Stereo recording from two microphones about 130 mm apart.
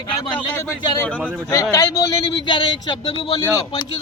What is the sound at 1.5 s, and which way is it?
A man's voice, 25° left (ahead or behind).